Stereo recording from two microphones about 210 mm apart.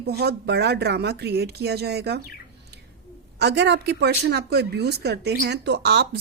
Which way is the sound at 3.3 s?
55° right (ahead or behind).